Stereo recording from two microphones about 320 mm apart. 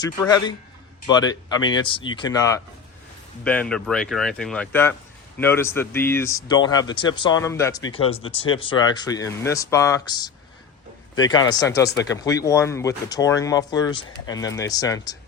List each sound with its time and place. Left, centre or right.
0.0 s speech: centre
11.9 s speech: left
12.1 s speech: centre